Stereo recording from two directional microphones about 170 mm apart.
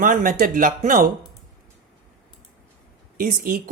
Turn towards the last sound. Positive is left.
turn(degrees=-55)  # may be behind; listen again after turning